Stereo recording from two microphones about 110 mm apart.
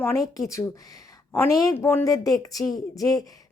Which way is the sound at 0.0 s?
30° left (ahead or behind).